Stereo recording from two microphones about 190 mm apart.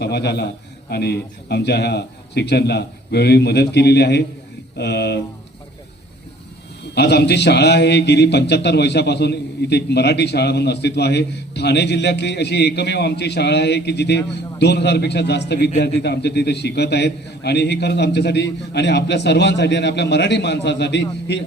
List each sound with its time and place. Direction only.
0.0 s a man's voice: 60° left (ahead or behind)
6.9 s a man's voice: 60° left (ahead or behind)